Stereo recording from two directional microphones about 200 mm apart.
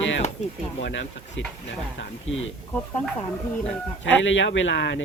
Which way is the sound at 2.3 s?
80° left.